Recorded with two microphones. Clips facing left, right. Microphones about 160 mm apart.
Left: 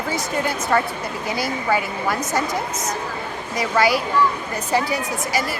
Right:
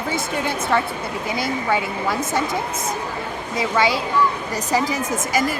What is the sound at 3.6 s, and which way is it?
Speech, 25° right (ahead or behind).